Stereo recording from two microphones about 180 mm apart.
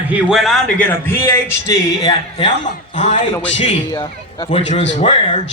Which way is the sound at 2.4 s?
40° left (ahead or behind).